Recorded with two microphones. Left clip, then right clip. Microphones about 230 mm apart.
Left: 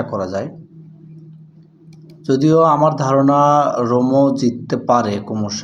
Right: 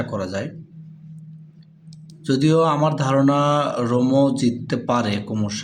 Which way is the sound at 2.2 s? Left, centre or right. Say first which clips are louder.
Left 5 dB; right.